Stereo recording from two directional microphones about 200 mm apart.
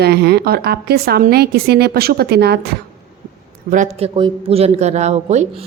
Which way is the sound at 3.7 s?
35° right (ahead or behind).